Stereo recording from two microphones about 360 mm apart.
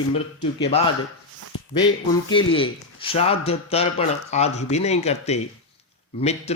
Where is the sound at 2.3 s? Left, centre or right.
Centre.